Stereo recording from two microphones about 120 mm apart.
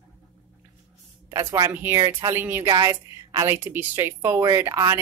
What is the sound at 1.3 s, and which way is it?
Speech, 30° right (ahead or behind).